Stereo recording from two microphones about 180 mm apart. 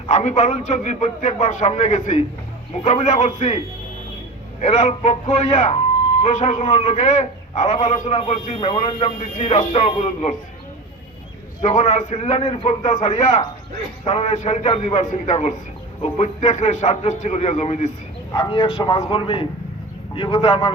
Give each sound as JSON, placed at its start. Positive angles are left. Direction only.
{"t": 0.1, "sound": "a man's voice", "side_deg": 40}
{"t": 4.6, "sound": "a man's voice", "side_deg": 40}
{"t": 11.6, "sound": "a man's voice", "side_deg": 40}
{"t": 18.3, "sound": "speech", "side_deg": 25}